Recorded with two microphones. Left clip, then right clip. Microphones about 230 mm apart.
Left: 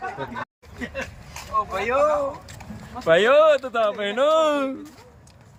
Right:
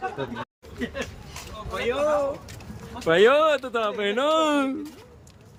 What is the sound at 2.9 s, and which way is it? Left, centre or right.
Speech, centre.